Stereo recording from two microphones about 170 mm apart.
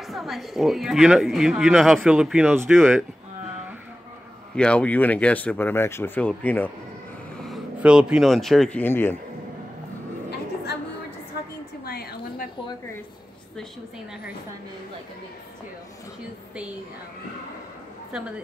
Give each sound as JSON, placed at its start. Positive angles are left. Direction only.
{"t": 0.0, "sound": "speech", "side_deg": 0}
{"t": 4.6, "sound": "speech", "side_deg": 5}
{"t": 7.4, "sound": "speech", "side_deg": -5}
{"t": 11.8, "sound": "a sound", "side_deg": 65}